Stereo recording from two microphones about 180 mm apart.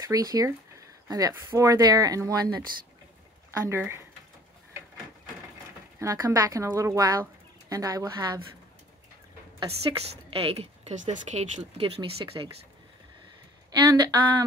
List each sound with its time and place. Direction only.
0.1 s speech: 20° right (ahead or behind)
3.6 s speech: 15° right (ahead or behind)
5.9 s speech: 20° right (ahead or behind)
9.6 s a woman's voice: 30° right (ahead or behind)
12.4 s speech: 25° right (ahead or behind)
13.7 s speech: 20° right (ahead or behind)